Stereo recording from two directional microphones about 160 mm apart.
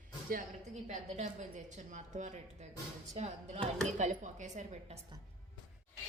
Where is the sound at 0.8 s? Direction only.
50° right (ahead or behind).